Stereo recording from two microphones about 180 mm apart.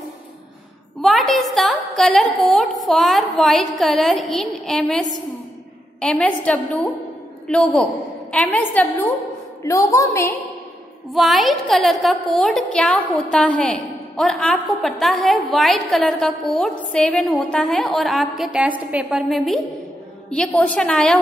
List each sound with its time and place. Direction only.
1.0 s a woman's voice: centre (ahead or behind); by 10.3 s 15° left (ahead or behind)
11.1 s a woman's voice: centre (ahead or behind)